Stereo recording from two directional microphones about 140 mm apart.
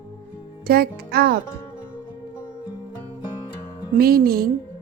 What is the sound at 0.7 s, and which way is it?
Speech, 90° right.